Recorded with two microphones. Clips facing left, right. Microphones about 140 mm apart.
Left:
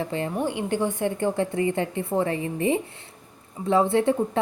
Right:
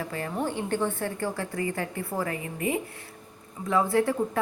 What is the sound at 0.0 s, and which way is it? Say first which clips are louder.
A woman's voice: left 4 dB; 25° left (ahead or behind).